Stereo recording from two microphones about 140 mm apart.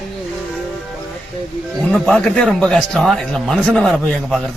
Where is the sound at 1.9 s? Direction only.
5° left (ahead or behind).